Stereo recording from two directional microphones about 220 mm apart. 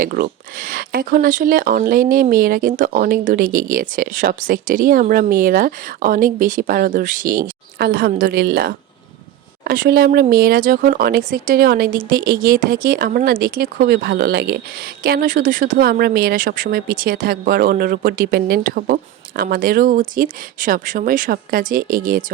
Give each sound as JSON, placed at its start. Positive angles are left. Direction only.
{"t": 0.0, "sound": "speech", "side_deg": -40}